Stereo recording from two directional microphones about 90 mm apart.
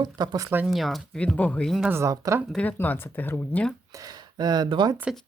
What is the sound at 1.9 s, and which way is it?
Speech, 35° right (ahead or behind).